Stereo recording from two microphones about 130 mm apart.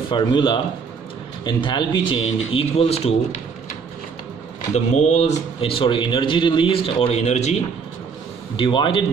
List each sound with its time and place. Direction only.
0.1 s a man's voice: 40° left (ahead or behind)
2.2 s a man's voice: 50° left (ahead or behind)
4.7 s a man's voice: 60° left (ahead or behind)
8.5 s a man's voice: 40° left (ahead or behind)